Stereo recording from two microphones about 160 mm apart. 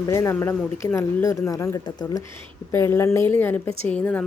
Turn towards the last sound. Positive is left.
turn(degrees=10)  # may be behind; listen again after turning